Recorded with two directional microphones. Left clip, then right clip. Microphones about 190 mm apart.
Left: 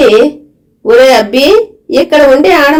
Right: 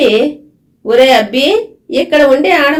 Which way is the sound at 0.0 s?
40° left (ahead or behind).